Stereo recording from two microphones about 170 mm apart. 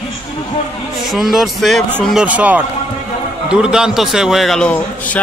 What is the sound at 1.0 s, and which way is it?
A man's voice, centre (ahead or behind).